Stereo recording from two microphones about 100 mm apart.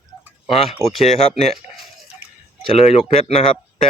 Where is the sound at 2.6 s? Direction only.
80° left.